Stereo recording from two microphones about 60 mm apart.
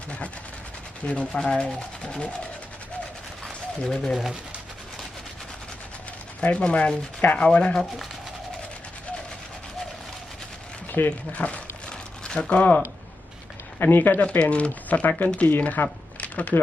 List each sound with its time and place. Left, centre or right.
1.0 s speech: centre
3.4 s a sound: centre
6.4 s speech: centre
11.3 s a sound: left
13.7 s speech: left
14.2 s speech: left